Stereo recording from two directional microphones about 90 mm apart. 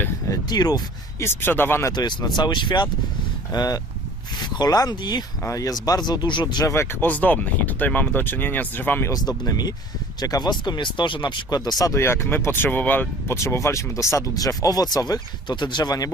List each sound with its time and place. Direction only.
0.3 s speech: 50° left (ahead or behind)
1.2 s speech: 25° left (ahead or behind)
1.9 s speech: 55° left (ahead or behind)
3.5 s speech: 50° left (ahead or behind)
5.4 s speech: 40° left (ahead or behind)
6.7 s speech: 30° left (ahead or behind)
7.1 s speech: 15° left (ahead or behind)
9.0 s speech: 45° left (ahead or behind)
10.6 s speech: 60° left (ahead or behind); by 11.9 s 45° left (ahead or behind)
11.9 s speech: 30° left (ahead or behind); by 16.0 s 50° left (ahead or behind)